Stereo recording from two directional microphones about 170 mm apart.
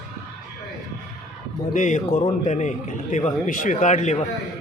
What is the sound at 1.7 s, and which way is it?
A man's voice, 45° left (ahead or behind).